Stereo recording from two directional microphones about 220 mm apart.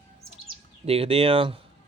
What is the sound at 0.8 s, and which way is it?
Speech, 25° right (ahead or behind).